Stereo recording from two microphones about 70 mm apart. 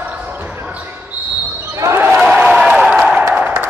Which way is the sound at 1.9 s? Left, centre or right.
Centre.